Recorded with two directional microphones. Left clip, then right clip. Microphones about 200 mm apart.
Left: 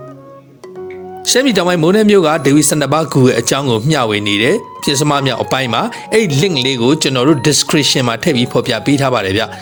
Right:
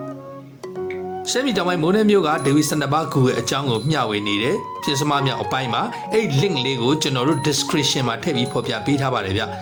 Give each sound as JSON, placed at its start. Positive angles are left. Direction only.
{"t": 1.3, "sound": "a man's voice", "side_deg": 40}